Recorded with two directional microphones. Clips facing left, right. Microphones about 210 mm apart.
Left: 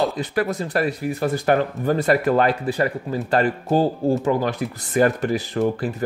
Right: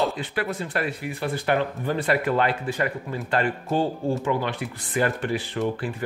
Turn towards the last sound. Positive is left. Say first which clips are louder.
# left 5 dB
turn(degrees=40)  # may be behind; listen again after turning